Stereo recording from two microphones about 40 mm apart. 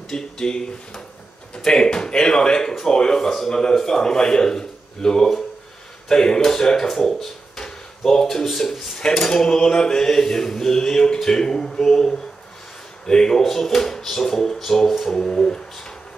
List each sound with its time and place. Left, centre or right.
0.1 s a man's voice: centre
8.9 s a man's voice: centre